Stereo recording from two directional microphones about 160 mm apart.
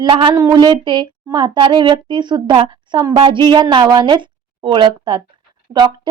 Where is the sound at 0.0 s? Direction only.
30° right (ahead or behind).